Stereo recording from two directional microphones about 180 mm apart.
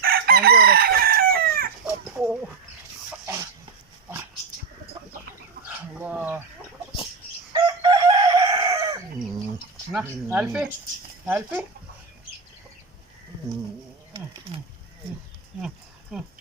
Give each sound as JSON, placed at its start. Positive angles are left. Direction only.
{"t": 0.0, "sound": "chicken", "side_deg": -55}
{"t": 2.1, "sound": "bird", "side_deg": -5}
{"t": 5.6, "sound": "dog", "side_deg": -10}
{"t": 7.5, "sound": "chicken", "side_deg": -25}
{"t": 9.9, "sound": "speech", "side_deg": -10}
{"t": 16.1, "sound": "a sound", "side_deg": -5}